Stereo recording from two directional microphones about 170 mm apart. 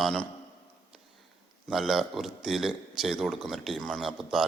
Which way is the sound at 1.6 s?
Centre (ahead or behind).